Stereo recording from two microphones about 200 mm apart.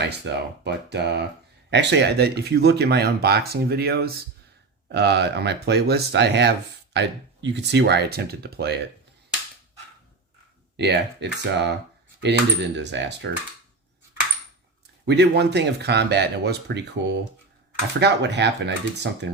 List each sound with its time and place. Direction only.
0.0 s speech: 55° right (ahead or behind)
10.8 s speech: 60° right (ahead or behind)
15.0 s speech: 55° right (ahead or behind)